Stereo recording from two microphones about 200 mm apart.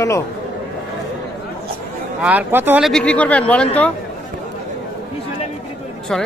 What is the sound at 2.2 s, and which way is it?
Speech, 10° right (ahead or behind).